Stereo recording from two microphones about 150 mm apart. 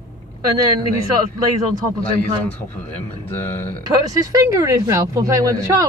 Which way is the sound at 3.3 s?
15° left (ahead or behind).